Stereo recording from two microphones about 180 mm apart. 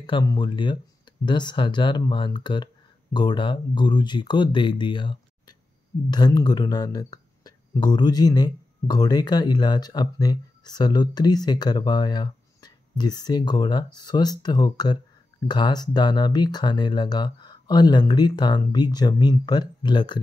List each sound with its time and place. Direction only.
0.0 s speech: 25° left (ahead or behind)